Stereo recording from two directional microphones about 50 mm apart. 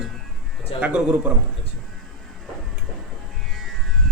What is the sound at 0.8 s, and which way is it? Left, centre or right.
Speech, right.